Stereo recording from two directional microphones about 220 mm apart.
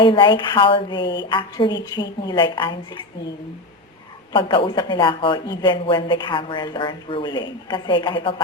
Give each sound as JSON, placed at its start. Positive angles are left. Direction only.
{"t": 0.0, "sound": "speech", "side_deg": 20}
{"t": 4.3, "sound": "speech", "side_deg": 20}